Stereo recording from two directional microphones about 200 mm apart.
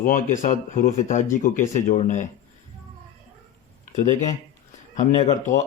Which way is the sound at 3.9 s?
35° left (ahead or behind).